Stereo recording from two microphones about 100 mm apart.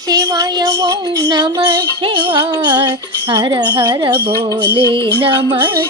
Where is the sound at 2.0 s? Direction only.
60° right (ahead or behind).